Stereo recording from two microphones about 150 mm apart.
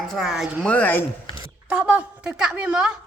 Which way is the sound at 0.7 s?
10° left (ahead or behind).